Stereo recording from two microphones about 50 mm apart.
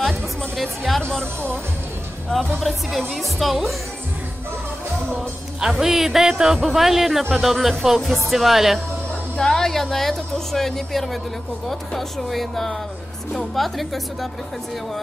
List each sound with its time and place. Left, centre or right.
0.0 s music: centre
1.2 s speech: right
2.3 s speech: centre
5.7 s speech: centre
9.4 s speech: centre